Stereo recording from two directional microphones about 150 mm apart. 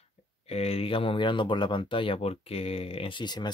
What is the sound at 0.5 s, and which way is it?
Speech, 45° left (ahead or behind).